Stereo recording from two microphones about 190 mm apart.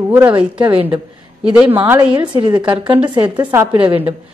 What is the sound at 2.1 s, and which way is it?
A woman's voice, 25° right (ahead or behind).